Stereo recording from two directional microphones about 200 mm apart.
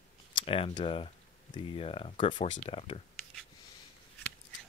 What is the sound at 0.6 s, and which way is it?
Speech, 25° left (ahead or behind).